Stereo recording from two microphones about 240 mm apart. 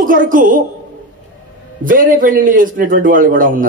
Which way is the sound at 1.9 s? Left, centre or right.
Right.